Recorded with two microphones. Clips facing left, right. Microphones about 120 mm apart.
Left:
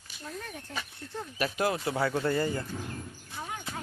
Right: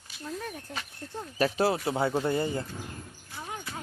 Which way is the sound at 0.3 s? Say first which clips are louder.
Right 4 dB; 5° right (ahead or behind).